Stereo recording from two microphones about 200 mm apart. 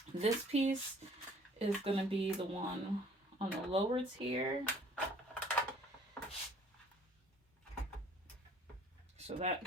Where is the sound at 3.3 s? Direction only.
30° right (ahead or behind).